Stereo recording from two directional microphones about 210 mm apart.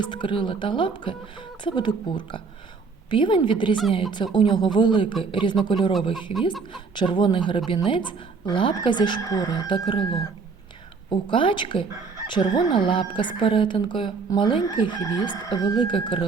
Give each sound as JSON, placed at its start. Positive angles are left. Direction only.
{"t": 0.0, "sound": "a woman's voice", "side_deg": 25}